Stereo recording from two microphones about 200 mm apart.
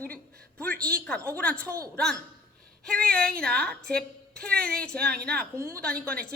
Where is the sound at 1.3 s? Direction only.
5° left (ahead or behind).